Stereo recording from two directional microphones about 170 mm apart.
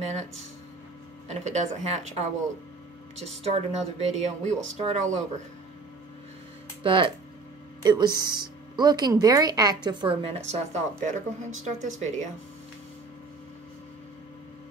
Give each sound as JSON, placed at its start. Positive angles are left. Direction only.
{"t": 0.0, "sound": "speech", "side_deg": -40}
{"t": 1.3, "sound": "speech", "side_deg": -40}
{"t": 6.8, "sound": "a woman's voice", "side_deg": -30}
{"t": 10.5, "sound": "speech", "side_deg": -45}